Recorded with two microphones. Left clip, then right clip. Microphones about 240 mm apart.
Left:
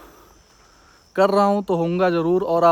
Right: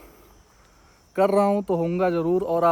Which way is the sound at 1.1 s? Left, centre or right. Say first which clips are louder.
Left 3 dB; centre.